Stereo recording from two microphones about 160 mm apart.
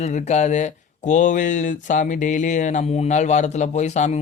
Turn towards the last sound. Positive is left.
turn(degrees=45)  # may be behind; listen again after turning